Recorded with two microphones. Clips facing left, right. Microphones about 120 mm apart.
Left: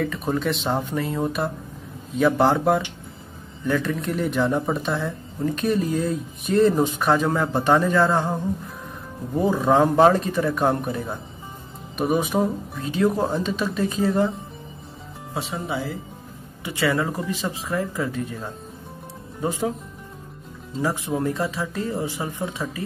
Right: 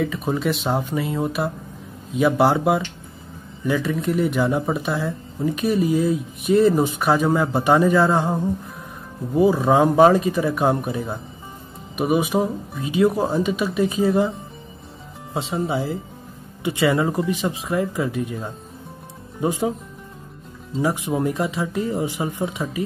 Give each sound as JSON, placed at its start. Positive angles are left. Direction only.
{"t": 0.0, "sound": "speech", "side_deg": -5}
{"t": 15.3, "sound": "speech", "side_deg": -25}
{"t": 20.8, "sound": "speech", "side_deg": -15}